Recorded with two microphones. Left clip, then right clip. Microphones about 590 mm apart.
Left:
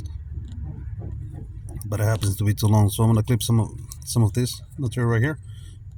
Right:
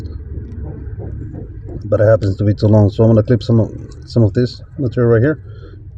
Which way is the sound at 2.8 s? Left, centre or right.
Left.